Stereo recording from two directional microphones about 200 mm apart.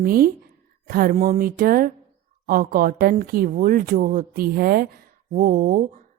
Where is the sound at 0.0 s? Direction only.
45° right (ahead or behind).